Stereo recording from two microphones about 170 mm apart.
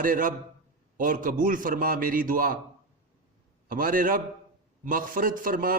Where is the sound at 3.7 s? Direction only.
55° right (ahead or behind).